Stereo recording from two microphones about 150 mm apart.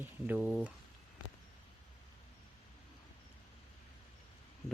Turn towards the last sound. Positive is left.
turn(degrees=-15)  # may be behind; listen again after turning